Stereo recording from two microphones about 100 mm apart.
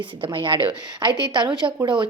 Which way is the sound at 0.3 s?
55° right (ahead or behind).